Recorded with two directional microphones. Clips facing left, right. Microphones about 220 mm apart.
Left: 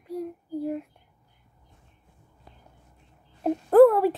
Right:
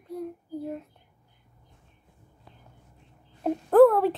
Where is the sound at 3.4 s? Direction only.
5° left (ahead or behind).